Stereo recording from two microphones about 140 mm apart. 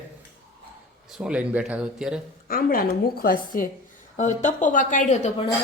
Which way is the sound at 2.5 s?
90° left.